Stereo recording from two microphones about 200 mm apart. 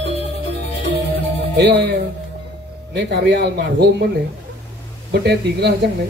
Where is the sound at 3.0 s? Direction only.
60° right (ahead or behind).